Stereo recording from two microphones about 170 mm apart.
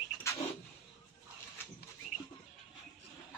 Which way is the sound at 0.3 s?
15° left (ahead or behind).